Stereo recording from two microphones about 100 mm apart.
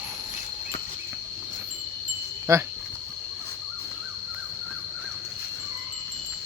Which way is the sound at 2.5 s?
30° right (ahead or behind).